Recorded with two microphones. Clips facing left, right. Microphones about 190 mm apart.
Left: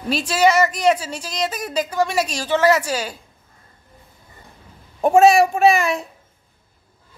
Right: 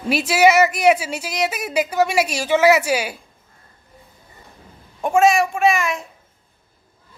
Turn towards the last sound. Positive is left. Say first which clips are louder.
# left 3 dB
turn(degrees=35)  # may be behind; listen again after turning